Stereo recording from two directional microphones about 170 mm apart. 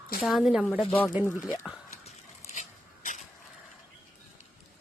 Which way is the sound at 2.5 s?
50° left (ahead or behind).